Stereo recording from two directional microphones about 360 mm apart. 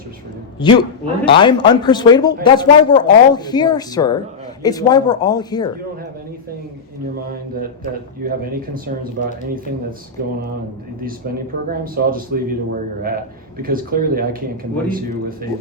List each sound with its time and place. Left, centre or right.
0.6 s speech: centre
8.2 s speech: right
11.7 s speech: right
13.6 s speech: right